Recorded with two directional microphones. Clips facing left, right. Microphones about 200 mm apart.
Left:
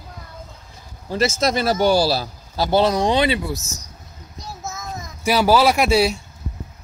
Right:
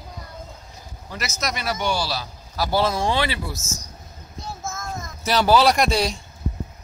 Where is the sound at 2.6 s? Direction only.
20° left (ahead or behind).